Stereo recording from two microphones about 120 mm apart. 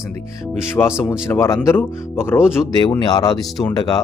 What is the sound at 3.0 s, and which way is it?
Speech, 35° left (ahead or behind).